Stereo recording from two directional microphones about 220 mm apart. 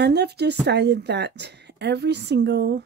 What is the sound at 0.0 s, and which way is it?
Speech, 50° right (ahead or behind).